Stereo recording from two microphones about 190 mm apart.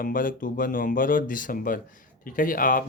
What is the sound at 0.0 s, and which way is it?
Speech, 45° left (ahead or behind).